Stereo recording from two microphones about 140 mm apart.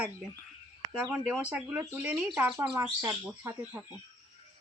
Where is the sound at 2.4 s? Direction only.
15° right (ahead or behind).